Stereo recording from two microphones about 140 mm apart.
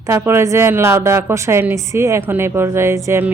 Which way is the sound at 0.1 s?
20° right (ahead or behind).